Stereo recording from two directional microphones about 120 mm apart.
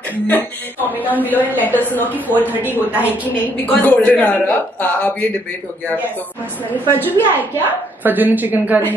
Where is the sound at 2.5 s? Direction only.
15° right (ahead or behind).